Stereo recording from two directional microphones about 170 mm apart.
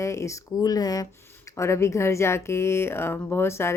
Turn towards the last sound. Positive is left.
turn(degrees=15)  # may be behind; listen again after turning